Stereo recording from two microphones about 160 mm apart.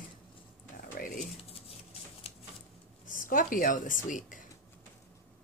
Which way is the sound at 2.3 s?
40° left (ahead or behind).